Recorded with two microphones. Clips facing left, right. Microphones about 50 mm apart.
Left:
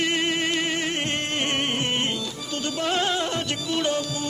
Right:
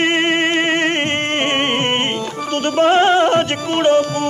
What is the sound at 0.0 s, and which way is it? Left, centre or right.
Music, right.